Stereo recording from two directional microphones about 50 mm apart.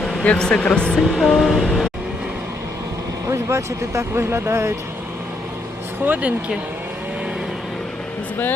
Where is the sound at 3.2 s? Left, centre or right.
Right.